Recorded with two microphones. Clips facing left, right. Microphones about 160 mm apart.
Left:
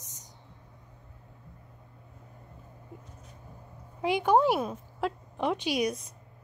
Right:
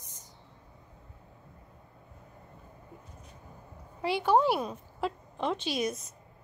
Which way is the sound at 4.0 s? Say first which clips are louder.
Left 2 dB; 15° left (ahead or behind).